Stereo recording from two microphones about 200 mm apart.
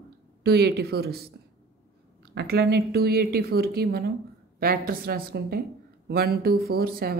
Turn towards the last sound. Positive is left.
turn(degrees=-50)  # may be behind; listen again after turning